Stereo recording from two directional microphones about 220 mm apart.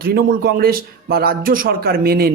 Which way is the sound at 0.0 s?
45° right (ahead or behind).